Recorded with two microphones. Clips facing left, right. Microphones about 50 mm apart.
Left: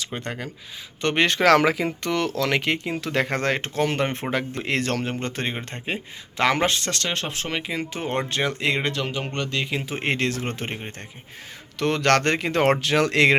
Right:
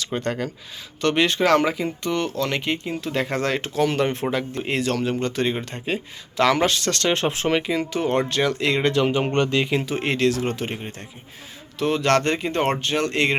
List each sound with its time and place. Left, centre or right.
0.0 s speech: centre
1.3 s speech: left
3.2 s speech: left
7.1 s speech: right
7.7 s speech: left
8.9 s speech: centre
9.1 s speech: right
9.8 s speech: left
11.8 s speech: left